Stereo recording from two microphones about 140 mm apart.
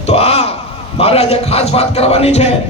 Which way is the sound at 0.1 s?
50° left (ahead or behind).